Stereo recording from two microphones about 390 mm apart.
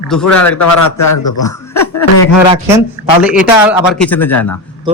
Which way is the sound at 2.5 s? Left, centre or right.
Centre.